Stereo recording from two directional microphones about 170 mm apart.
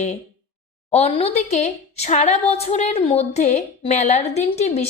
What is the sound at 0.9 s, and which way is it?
A woman's voice, 40° left (ahead or behind).